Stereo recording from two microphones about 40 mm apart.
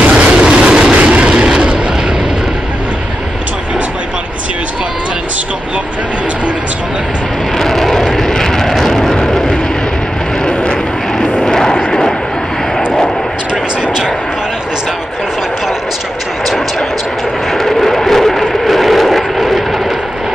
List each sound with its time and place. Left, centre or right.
0.1 s train: right
0.9 s vehicle: right
7.5 s vehicle: centre; by 10.8 s left
11.4 s a sound: centre
12.7 s vehicle: centre
17.5 s vehicle: centre